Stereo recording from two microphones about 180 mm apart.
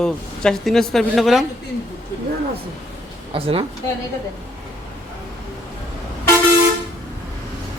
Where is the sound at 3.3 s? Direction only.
30° right (ahead or behind).